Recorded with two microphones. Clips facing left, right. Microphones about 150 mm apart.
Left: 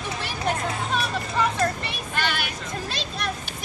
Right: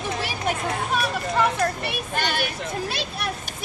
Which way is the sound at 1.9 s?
45° right (ahead or behind).